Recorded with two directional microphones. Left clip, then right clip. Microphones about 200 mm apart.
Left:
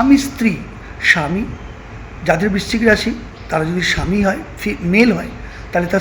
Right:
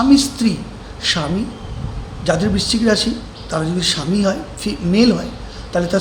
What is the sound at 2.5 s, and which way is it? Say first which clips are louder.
Speech: right 1 dB; 65° right (ahead or behind).